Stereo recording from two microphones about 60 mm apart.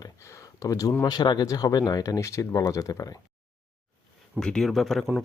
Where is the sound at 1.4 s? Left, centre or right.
Left.